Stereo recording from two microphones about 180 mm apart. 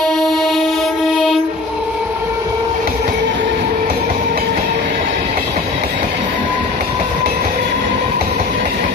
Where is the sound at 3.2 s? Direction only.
90° right.